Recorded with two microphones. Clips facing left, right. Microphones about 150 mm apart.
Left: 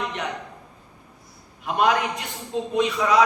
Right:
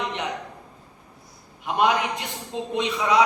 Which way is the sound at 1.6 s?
20° right (ahead or behind).